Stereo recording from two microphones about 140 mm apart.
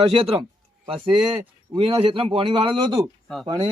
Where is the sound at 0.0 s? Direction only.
40° right (ahead or behind).